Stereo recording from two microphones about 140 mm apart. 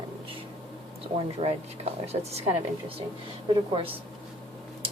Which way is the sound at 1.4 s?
50° right (ahead or behind).